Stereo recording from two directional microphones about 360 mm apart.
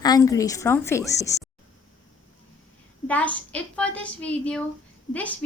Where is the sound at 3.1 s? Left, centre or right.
Centre.